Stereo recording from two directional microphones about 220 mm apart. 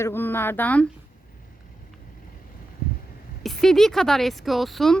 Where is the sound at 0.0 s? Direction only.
10° left (ahead or behind).